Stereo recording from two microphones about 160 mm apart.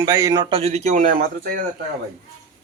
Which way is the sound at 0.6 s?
40° right (ahead or behind).